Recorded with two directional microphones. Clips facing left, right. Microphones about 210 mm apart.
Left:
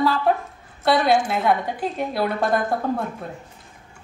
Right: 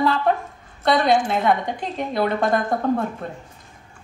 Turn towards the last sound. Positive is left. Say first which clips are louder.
# right 3 dB
turn(degrees=5)  # may be behind; listen again after turning